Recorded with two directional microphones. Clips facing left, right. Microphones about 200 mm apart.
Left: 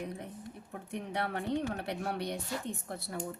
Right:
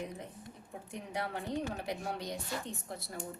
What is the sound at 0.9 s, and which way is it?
A woman's voice, 65° left (ahead or behind).